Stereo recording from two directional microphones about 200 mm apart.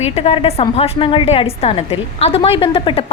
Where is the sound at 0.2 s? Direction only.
30° left (ahead or behind).